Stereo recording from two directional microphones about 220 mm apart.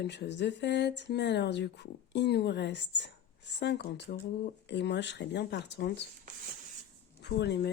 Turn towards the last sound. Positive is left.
turn(degrees=50)  # may be behind; listen again after turning